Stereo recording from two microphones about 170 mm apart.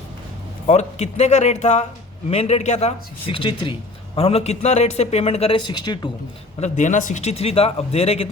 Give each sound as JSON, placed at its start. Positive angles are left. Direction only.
{"t": 0.7, "sound": "speech", "side_deg": 40}
{"t": 6.6, "sound": "speech", "side_deg": 45}